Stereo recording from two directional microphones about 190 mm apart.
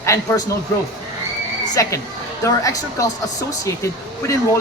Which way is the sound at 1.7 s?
15° left (ahead or behind).